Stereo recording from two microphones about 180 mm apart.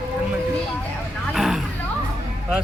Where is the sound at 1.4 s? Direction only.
Centre (ahead or behind).